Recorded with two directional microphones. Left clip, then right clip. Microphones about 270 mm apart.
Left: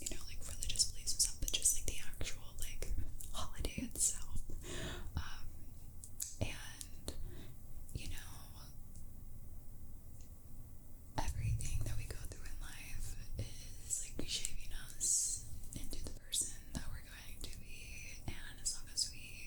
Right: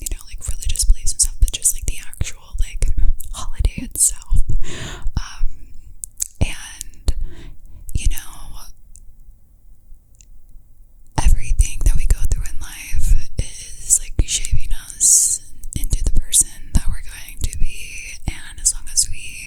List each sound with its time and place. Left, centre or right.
0.0 s whispering: right
11.1 s whispering: right